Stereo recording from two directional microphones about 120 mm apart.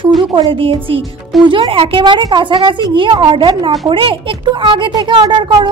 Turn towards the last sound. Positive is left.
turn(degrees=-40)  # may be behind; listen again after turning